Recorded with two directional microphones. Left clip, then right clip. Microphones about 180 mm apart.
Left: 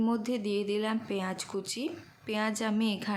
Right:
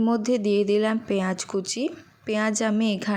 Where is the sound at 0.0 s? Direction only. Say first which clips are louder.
Right 8 dB; 30° right (ahead or behind).